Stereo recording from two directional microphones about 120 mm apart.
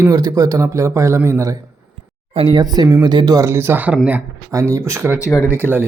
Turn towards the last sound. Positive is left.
turn(degrees=-15)  # may be behind; listen again after turning